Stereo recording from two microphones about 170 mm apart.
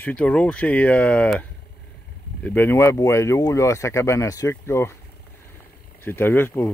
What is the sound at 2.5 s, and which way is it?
Speech, 10° left (ahead or behind).